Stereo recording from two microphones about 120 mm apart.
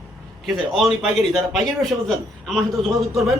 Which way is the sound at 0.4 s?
5° right (ahead or behind).